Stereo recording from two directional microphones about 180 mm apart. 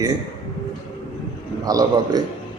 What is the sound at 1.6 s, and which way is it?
Speech, 20° right (ahead or behind).